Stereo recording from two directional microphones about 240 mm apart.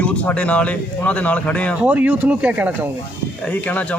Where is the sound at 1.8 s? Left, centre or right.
Centre.